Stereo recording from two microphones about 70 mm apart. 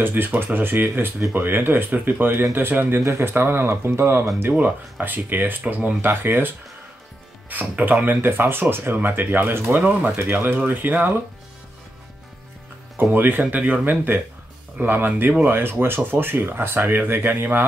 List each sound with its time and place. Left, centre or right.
0.0 s speech: right
13.1 s speech: right